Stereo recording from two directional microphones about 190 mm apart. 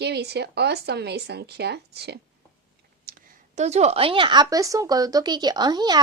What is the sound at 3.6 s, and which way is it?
Speech, 35° right (ahead or behind).